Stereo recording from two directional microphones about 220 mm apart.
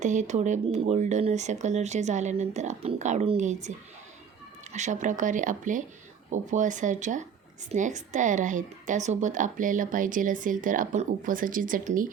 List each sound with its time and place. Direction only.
0.0 s speech: 35° right (ahead or behind)
4.7 s speech: 35° right (ahead or behind)